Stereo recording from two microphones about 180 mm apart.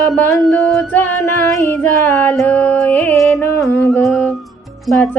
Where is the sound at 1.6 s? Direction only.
15° left (ahead or behind).